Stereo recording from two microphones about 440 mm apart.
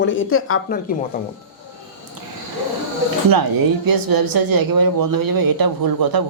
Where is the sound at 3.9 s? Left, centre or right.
Right.